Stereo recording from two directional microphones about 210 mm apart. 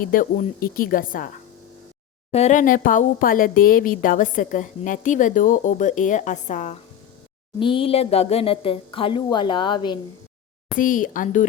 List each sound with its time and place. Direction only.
0.0 s a woman's voice: 40° left (ahead or behind)
2.3 s a woman's voice: 35° left (ahead or behind)
7.6 s speech: 25° left (ahead or behind)
10.8 s a woman's voice: 40° left (ahead or behind)